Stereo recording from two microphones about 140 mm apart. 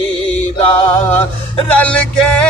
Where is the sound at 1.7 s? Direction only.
10° left (ahead or behind).